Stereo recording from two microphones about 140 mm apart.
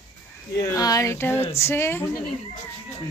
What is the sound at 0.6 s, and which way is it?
A woman's voice, 25° left (ahead or behind).